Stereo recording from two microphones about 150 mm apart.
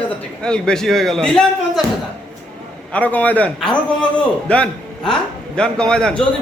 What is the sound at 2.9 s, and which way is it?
A woman's voice, 10° left (ahead or behind).